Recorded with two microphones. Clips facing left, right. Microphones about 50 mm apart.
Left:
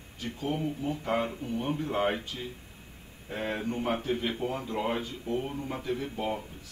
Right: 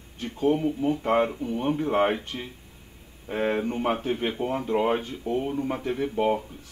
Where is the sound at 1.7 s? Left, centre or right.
Right.